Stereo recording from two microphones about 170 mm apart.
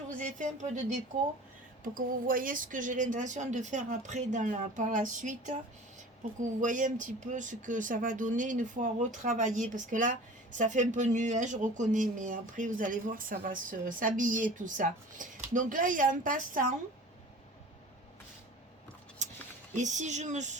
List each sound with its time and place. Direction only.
0.1 s speech: 50° right (ahead or behind)
6.6 s speech: 50° right (ahead or behind)
19.2 s a sound: 45° right (ahead or behind)
19.7 s speech: 45° right (ahead or behind)